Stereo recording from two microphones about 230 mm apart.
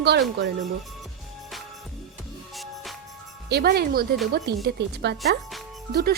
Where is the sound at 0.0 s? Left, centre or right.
Right.